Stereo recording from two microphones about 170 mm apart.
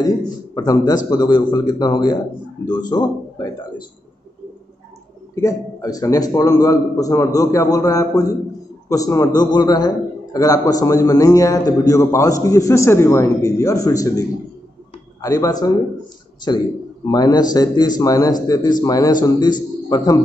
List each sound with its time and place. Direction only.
0.6 s a man's voice: 20° left (ahead or behind)
5.3 s a man's voice: 20° left (ahead or behind)
15.2 s a man's voice: 20° left (ahead or behind)
17.1 s a man's voice: 25° left (ahead or behind)